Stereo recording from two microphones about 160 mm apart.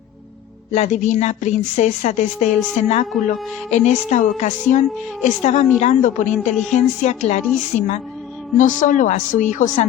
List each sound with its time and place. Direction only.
0.7 s a woman's voice: 50° left (ahead or behind)